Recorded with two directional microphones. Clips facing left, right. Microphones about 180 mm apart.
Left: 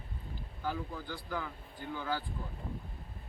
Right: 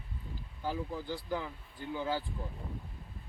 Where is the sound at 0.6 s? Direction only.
25° right (ahead or behind).